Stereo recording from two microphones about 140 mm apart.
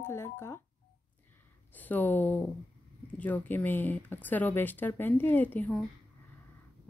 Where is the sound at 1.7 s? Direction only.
10° left (ahead or behind).